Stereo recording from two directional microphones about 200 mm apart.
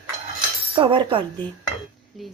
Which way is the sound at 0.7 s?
25° right (ahead or behind).